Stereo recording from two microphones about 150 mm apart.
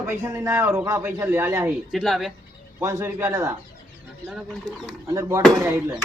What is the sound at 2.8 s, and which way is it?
Speech, 15° right (ahead or behind).